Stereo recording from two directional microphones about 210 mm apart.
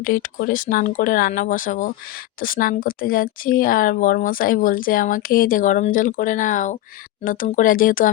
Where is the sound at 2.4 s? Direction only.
40° left (ahead or behind).